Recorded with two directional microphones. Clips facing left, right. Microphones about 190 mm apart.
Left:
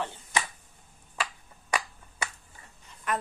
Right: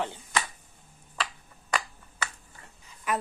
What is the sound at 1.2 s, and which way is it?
Finger snapping, 15° left (ahead or behind).